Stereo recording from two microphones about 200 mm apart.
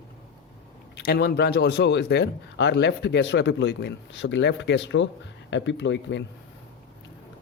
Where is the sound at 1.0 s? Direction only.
55° left (ahead or behind).